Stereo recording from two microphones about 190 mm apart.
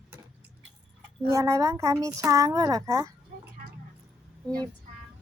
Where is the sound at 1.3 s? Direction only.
15° right (ahead or behind).